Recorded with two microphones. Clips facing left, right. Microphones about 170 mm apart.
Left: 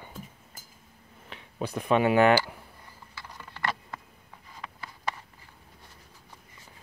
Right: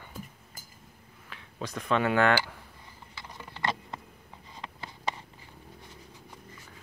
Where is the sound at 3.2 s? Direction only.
15° right (ahead or behind).